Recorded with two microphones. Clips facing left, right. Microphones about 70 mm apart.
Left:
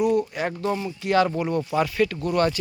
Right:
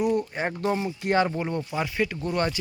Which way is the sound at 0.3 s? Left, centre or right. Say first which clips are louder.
Left 1 dB; right.